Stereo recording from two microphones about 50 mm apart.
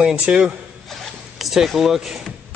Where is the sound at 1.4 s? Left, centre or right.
Centre.